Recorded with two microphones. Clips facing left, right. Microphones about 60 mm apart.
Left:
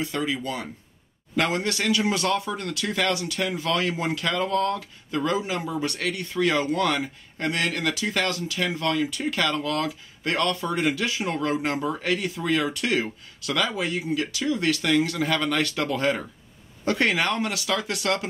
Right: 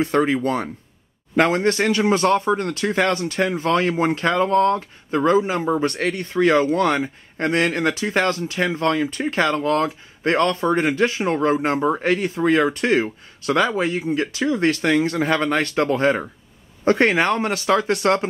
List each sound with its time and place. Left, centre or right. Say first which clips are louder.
0.0 s speech: right 9 dB; right